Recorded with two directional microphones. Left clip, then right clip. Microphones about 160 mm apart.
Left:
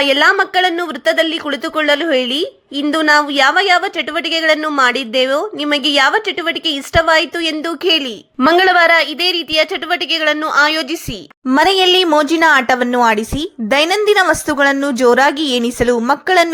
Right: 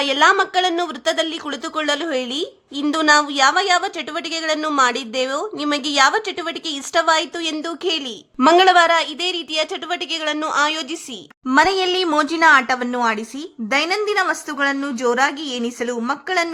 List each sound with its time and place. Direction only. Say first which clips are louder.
0.0 s a woman's voice: left 4 dB; 15° left (ahead or behind)
11.5 s a woman's voice: left 5 dB; 30° left (ahead or behind)